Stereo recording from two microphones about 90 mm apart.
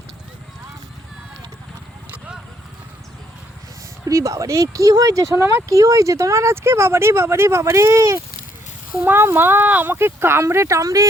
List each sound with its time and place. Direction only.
2.0 s clip-clop: 15° right (ahead or behind)
4.0 s speech: 35° right (ahead or behind)